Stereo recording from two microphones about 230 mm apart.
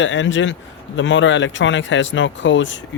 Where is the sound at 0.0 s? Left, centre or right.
Left.